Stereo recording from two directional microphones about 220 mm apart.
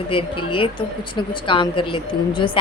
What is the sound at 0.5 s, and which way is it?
A woman's voice, 25° left (ahead or behind).